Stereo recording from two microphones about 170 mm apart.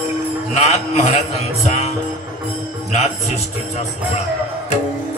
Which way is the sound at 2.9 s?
40° left (ahead or behind).